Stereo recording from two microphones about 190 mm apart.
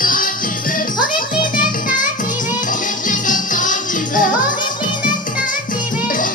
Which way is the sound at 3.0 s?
45° left (ahead or behind).